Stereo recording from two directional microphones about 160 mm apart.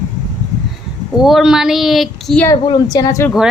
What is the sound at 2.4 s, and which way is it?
Speech, 25° left (ahead or behind).